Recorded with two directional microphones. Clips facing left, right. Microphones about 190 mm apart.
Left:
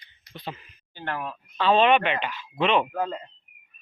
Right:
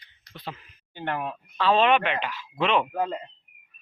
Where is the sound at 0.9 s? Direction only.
15° right (ahead or behind).